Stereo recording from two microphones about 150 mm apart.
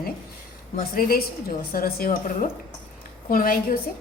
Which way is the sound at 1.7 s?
85° left.